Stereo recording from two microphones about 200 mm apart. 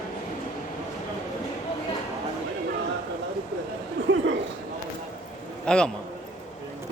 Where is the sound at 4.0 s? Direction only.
60° right (ahead or behind).